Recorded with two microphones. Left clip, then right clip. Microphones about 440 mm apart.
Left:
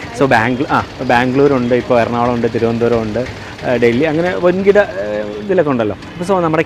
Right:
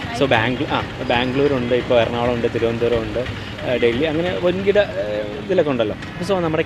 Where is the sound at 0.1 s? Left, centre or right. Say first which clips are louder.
Left 5 dB; left.